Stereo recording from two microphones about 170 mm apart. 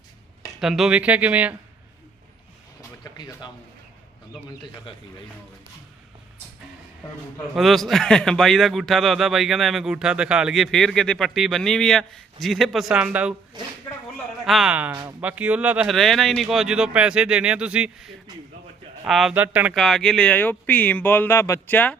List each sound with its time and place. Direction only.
0.6 s speech: centre (ahead or behind)
3.0 s a sound: 25° left (ahead or behind)
4.4 s speech: 30° left (ahead or behind)
7.5 s a man's voice: centre (ahead or behind)
13.5 s speech: 25° right (ahead or behind)
14.4 s a man's voice: centre (ahead or behind)
19.7 s speech: centre (ahead or behind)